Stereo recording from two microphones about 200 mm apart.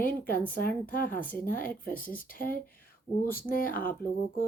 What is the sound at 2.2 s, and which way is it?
Speech, 45° left (ahead or behind).